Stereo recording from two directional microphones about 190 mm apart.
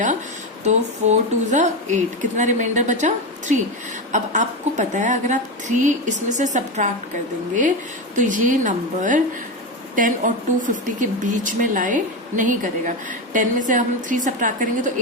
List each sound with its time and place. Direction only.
0.6 s a woman's voice: 40° right (ahead or behind)
8.1 s a woman's voice: 40° right (ahead or behind)